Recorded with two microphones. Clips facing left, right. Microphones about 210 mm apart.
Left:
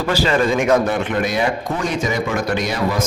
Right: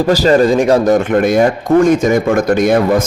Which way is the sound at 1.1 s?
50° right (ahead or behind).